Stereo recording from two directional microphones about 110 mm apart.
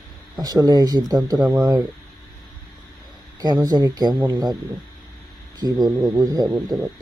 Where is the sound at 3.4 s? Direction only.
35° right (ahead or behind).